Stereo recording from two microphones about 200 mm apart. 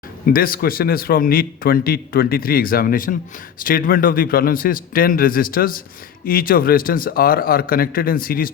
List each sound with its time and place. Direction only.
0.3 s a man's voice: 45° left (ahead or behind)